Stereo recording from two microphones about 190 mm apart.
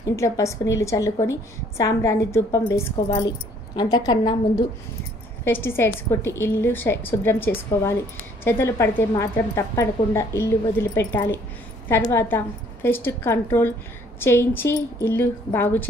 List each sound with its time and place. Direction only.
0.1 s a woman's voice: 15° left (ahead or behind)
5.4 s a woman's voice: 10° left (ahead or behind)